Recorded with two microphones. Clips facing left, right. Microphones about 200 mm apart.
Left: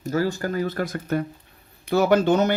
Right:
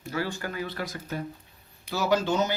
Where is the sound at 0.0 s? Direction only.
40° left (ahead or behind).